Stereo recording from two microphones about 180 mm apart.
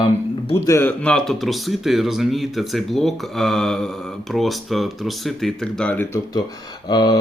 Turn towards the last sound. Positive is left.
turn(degrees=25)  # may be behind; listen again after turning